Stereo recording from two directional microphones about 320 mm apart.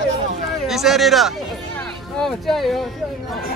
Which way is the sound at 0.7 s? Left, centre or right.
Centre.